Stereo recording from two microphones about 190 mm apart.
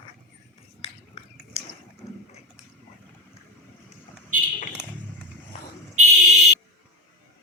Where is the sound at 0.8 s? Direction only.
35° left (ahead or behind).